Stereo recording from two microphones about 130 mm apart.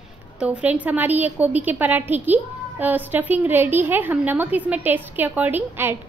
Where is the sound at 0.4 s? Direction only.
10° right (ahead or behind).